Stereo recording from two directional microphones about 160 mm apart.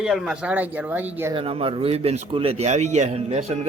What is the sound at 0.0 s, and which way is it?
Speech, centre (ahead or behind).